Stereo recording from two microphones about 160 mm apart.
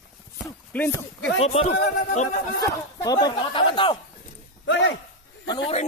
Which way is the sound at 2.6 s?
20° left (ahead or behind).